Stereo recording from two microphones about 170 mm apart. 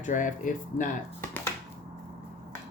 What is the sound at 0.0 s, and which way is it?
Speech, 50° left (ahead or behind).